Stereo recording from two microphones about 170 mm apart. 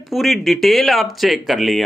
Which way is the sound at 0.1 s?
Centre (ahead or behind).